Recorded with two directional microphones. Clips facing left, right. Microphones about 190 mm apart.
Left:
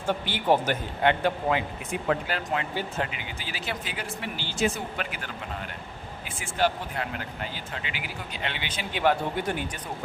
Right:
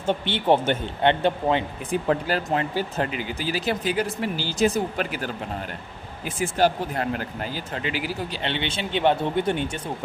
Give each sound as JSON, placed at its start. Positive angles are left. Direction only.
{"t": 0.0, "sound": "a man's voice", "side_deg": -25}